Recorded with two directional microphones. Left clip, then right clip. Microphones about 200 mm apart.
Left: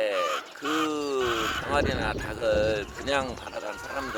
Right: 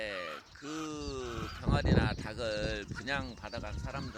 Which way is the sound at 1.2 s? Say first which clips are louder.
Left 15 dB; 45° right (ahead or behind).